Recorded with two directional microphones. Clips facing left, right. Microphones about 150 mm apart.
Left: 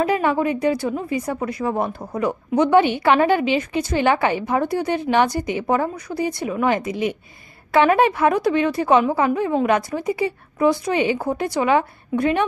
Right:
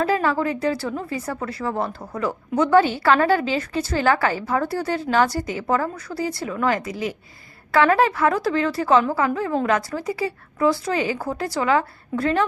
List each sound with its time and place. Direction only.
0.0 s a woman's voice: 20° left (ahead or behind)